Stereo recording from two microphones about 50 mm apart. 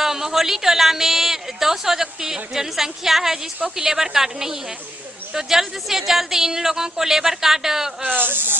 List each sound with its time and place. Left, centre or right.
0.0 s a woman's voice: centre
8.0 s speech: right